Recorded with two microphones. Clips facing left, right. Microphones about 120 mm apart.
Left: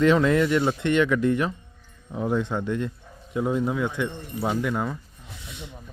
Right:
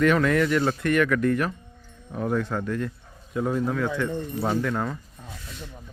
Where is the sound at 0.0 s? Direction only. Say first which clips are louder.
Left 1 dB; 25° left (ahead or behind).